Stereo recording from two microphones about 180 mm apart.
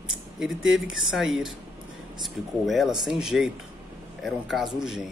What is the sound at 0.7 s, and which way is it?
Speech, centre (ahead or behind).